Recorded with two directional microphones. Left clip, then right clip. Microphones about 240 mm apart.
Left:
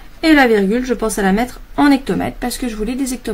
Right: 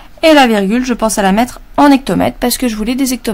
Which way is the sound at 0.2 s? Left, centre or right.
Right.